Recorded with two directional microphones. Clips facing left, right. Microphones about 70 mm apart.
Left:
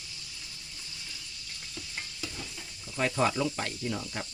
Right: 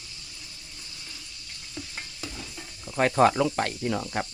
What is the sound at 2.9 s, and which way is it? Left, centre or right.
Speech, right.